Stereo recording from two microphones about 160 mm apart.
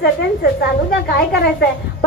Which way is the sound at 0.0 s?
85° left.